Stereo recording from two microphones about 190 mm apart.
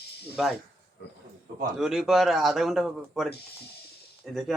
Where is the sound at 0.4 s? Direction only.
Centre (ahead or behind).